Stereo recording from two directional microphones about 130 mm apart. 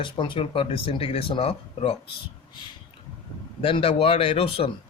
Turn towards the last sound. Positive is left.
turn(degrees=45)  # may be behind; listen again after turning